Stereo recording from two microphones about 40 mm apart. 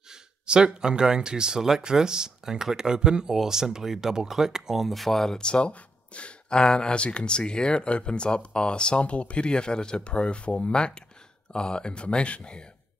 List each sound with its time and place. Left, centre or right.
0.1 s speech: right; by 5.4 s centre
5.4 s speech: left